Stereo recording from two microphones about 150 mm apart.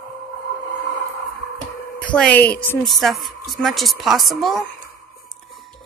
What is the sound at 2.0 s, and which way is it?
Speech, 10° left (ahead or behind).